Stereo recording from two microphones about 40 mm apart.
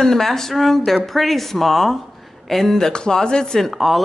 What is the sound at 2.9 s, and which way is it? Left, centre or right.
Speech, centre.